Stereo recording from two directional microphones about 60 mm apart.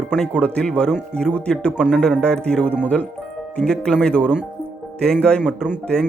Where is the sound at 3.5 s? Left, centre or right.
Centre.